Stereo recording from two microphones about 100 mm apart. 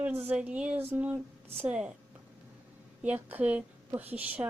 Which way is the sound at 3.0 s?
15° right (ahead or behind).